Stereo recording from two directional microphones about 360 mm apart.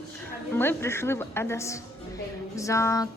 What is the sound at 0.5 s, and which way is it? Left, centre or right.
A woman's voice, centre.